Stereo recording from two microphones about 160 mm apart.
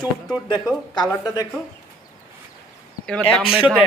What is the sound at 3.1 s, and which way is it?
Speech, 5° left (ahead or behind).